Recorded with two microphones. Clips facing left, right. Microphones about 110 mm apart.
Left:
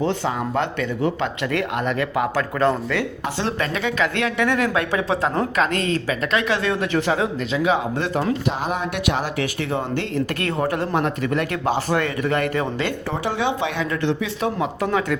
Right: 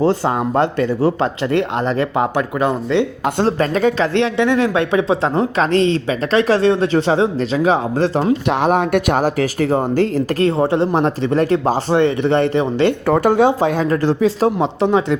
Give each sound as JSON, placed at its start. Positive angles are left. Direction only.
{"t": 0.0, "sound": "speech", "side_deg": -40}
{"t": 3.3, "sound": "speech", "side_deg": -40}
{"t": 8.4, "sound": "speech", "side_deg": -60}
{"t": 13.1, "sound": "speech", "side_deg": -55}